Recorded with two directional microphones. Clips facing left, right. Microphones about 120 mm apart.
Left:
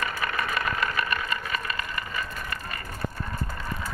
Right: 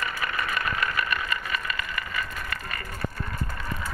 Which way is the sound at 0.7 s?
30° left (ahead or behind).